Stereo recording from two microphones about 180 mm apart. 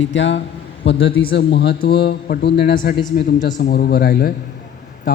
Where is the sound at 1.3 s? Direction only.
65° left (ahead or behind).